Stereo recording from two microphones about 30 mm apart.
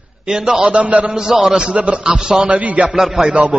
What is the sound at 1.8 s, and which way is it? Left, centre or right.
Speech, right.